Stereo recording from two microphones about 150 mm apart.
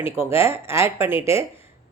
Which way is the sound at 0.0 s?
15° right (ahead or behind).